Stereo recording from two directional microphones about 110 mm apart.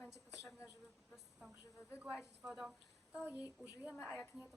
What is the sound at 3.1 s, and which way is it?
Speech, 10° right (ahead or behind).